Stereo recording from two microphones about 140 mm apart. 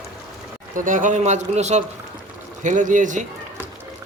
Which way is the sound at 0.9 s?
65° right (ahead or behind).